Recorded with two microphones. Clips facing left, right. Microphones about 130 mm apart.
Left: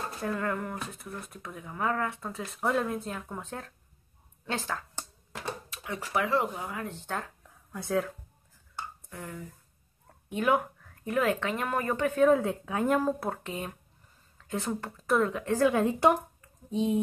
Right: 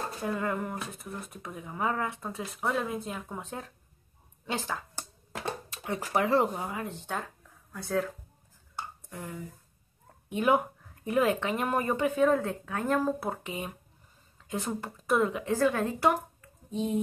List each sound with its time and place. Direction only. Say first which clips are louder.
0.2 s speech: even; 20° right (ahead or behind)
2.6 s speech: left 2 dB; 5° right (ahead or behind)
5.9 s speech: right 2 dB; 35° right (ahead or behind); by 7.0 s 20° right (ahead or behind)
8.7 s a sound: right 1 dB; 15° right (ahead or behind)
10.3 s speech: right 1 dB; 20° right (ahead or behind)
12.2 s speech: left 5 dB; 5° left (ahead or behind)
13.2 s a woman's voice: even; 10° right (ahead or behind)
15.7 s speech: left 3 dB; 20° left (ahead or behind)